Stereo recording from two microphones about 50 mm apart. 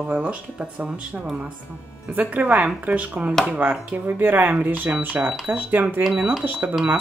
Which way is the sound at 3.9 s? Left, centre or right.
Right.